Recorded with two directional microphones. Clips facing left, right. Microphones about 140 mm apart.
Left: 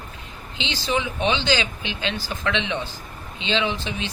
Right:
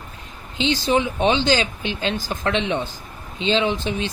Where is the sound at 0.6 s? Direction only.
45° right (ahead or behind).